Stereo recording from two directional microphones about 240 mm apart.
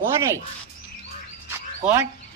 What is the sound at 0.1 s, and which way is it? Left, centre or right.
Speech, centre.